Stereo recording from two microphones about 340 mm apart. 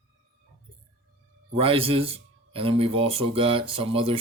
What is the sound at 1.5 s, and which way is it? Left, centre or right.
Speech, centre.